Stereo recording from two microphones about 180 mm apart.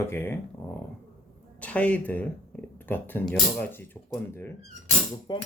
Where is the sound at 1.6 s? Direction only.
10° left (ahead or behind).